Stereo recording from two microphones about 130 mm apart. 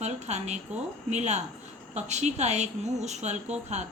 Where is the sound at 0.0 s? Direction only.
60° right (ahead or behind).